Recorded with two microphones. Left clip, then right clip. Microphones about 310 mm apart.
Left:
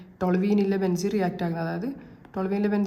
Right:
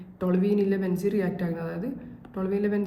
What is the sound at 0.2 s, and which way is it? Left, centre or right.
A woman's voice, centre.